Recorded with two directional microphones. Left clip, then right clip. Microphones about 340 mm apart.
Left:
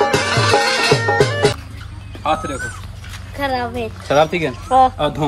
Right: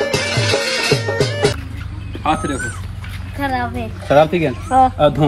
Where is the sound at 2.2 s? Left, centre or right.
Centre.